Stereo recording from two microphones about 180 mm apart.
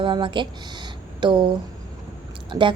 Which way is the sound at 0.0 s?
25° right (ahead or behind).